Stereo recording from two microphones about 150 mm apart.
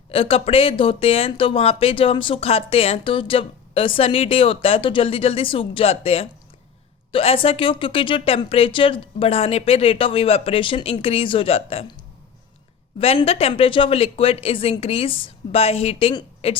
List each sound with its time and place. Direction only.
0.1 s speech: 40° left (ahead or behind)
13.0 s speech: 40° left (ahead or behind)